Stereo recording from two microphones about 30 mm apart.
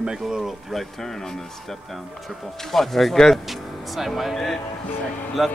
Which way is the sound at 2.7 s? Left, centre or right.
Centre.